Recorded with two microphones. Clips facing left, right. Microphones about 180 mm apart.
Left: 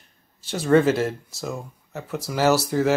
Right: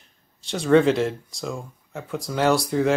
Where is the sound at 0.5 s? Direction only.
5° left (ahead or behind).